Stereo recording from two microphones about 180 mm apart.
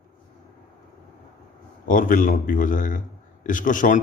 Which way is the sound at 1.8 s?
50° left (ahead or behind).